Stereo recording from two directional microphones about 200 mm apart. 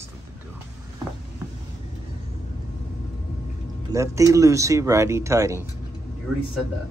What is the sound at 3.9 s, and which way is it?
Speech, 15° right (ahead or behind).